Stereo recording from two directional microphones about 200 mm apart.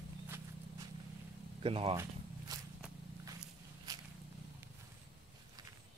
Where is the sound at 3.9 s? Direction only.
20° right (ahead or behind).